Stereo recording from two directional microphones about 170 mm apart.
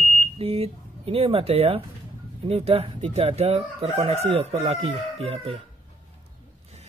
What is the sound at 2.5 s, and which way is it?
Chicken, 35° right (ahead or behind).